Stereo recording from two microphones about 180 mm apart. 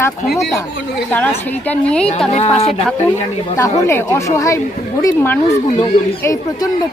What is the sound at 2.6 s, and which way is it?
Speech, 35° left (ahead or behind).